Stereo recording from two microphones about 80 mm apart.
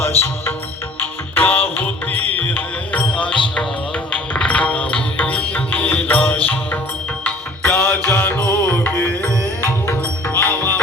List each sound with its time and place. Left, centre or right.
0.0 s music: left
8.0 s music: left